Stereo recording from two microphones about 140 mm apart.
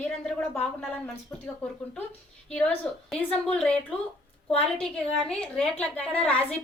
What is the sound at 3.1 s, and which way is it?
Speech, 5° left (ahead or behind).